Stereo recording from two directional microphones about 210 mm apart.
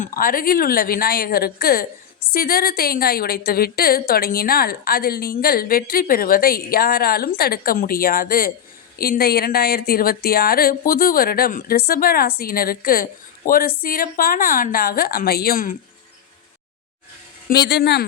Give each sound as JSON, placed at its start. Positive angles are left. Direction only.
{"t": 0.0, "sound": "a woman's voice", "side_deg": 40}
{"t": 17.5, "sound": "a woman's voice", "side_deg": 50}